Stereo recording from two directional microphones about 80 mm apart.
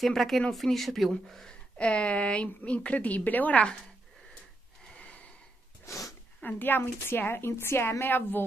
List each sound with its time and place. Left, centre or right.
0.0 s speech: centre
4.9 s a sound: centre
5.9 s sneeze: left
6.4 s a woman's voice: left